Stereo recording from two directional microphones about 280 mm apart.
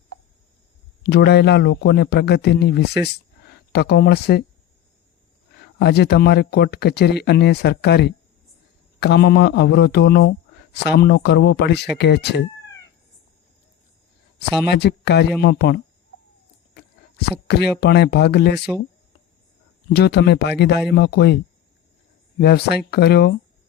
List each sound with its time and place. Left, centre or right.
1.0 s speech: left
5.8 s speech: left
14.7 s speech: left
17.2 s speech: left
19.9 s speech: left
22.4 s speech: left